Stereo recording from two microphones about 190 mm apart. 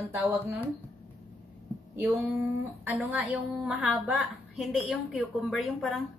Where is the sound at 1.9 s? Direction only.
10° right (ahead or behind).